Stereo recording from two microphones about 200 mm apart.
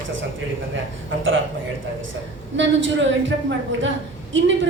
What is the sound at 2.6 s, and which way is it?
A woman's voice, 70° right (ahead or behind).